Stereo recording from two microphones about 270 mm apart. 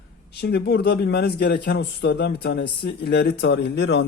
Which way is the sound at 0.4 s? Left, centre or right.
Left.